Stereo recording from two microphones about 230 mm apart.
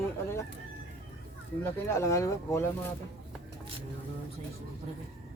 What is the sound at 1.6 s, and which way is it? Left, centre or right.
A man's voice, centre.